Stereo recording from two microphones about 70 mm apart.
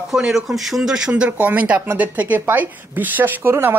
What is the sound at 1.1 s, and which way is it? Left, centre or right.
A man's voice, right.